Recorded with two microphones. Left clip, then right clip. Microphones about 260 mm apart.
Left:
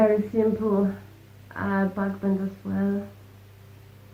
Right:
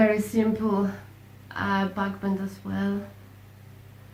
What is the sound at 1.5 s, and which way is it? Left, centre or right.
A woman's voice, right.